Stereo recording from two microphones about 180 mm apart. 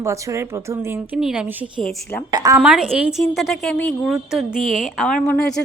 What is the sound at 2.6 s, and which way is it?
A woman's voice, 5° right (ahead or behind).